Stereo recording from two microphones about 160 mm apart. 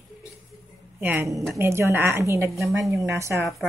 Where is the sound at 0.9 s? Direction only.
15° right (ahead or behind).